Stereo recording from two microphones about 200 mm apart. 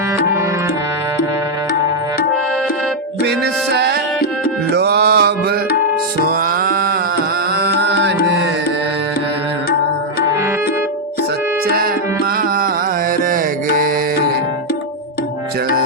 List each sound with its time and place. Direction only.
3.2 s music: 55° right (ahead or behind)
13.3 s music: 45° right (ahead or behind)